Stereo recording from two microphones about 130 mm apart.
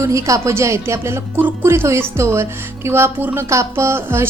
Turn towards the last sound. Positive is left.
turn(degrees=-20)  # may be behind; listen again after turning